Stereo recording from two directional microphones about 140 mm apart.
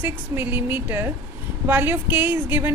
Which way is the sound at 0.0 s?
15° right (ahead or behind).